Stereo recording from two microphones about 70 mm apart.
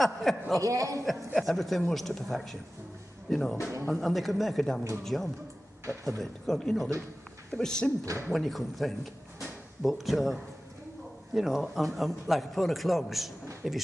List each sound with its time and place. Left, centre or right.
0.0 s a man's voice: centre
0.6 s a man's voice: right
1.4 s a man's voice: centre